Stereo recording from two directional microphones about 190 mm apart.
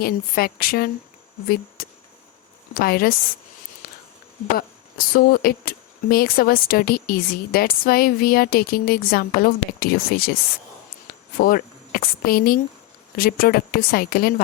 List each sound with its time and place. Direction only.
0.0 s a woman's voice: 50° left (ahead or behind)
3.8 s a sound: 50° left (ahead or behind)
4.5 s a woman's voice: 50° left (ahead or behind)
11.3 s a woman's voice: 50° left (ahead or behind)